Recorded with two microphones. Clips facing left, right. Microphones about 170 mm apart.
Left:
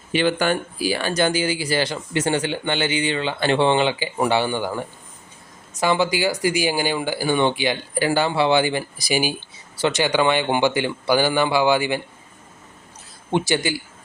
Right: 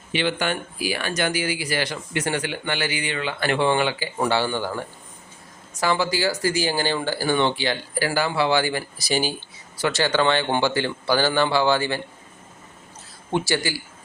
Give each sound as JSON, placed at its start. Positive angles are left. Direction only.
{"t": 0.1, "sound": "speech", "side_deg": 45}
{"t": 0.8, "sound": "speech", "side_deg": 30}
{"t": 13.3, "sound": "speech", "side_deg": 20}